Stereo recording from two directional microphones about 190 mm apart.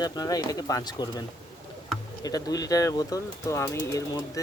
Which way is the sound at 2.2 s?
20° left (ahead or behind).